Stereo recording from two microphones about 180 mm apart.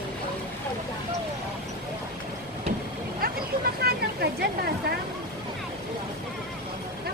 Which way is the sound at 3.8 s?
60° right (ahead or behind).